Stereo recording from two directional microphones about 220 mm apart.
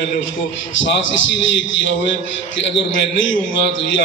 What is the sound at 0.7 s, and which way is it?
A man's voice, 55° left (ahead or behind).